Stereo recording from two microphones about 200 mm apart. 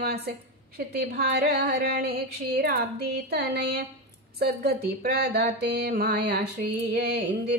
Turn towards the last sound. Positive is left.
turn(degrees=-55)  # may be behind; listen again after turning